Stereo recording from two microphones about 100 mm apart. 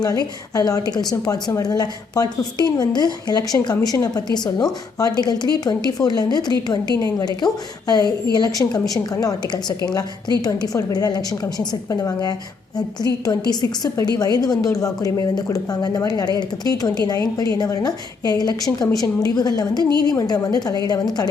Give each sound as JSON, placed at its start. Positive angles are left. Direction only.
{"t": 0.0, "sound": "a woman's voice", "side_deg": 40}
{"t": 3.8, "sound": "a woman's voice", "side_deg": 30}